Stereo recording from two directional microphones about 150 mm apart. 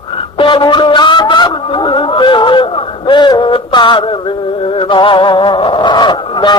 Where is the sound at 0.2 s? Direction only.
35° left (ahead or behind).